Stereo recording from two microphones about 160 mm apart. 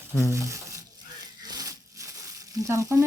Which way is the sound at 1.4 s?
25° right (ahead or behind).